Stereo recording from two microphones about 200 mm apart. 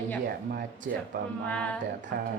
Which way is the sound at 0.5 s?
40° right (ahead or behind).